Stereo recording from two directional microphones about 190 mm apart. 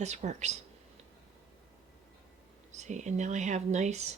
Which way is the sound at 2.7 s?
40° right (ahead or behind).